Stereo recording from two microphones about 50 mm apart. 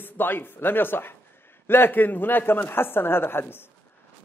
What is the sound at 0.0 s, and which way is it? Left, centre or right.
Speech, left.